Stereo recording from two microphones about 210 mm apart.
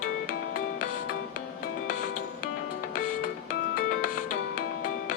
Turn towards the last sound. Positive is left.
turn(degrees=40)  # may be behind; listen again after turning